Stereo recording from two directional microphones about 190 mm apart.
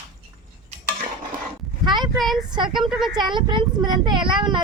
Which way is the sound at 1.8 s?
25° right (ahead or behind).